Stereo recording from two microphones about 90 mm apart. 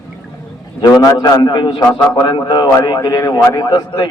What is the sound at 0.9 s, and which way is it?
Speech, 40° left (ahead or behind).